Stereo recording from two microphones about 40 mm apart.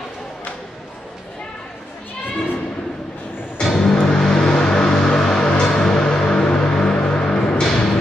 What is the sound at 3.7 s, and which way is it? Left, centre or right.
Music, centre.